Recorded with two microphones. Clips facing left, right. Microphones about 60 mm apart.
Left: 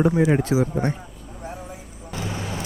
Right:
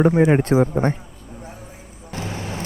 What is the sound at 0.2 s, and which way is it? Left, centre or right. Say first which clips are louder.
Speech: right 4 dB; right.